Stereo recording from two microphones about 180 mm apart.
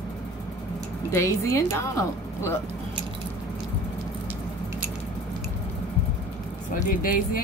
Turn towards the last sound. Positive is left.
turn(degrees=55)  # may be behind; listen again after turning